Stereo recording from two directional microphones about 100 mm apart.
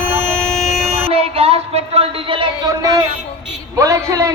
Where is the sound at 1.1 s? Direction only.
80° right; by 2.5 s 65° right (ahead or behind).